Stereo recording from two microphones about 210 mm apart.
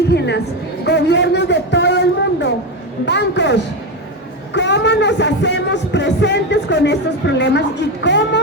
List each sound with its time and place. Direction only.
0.1 s a woman's voice: 55° left (ahead or behind)